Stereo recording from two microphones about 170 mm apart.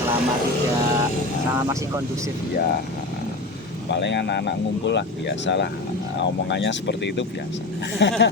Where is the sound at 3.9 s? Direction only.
90° left.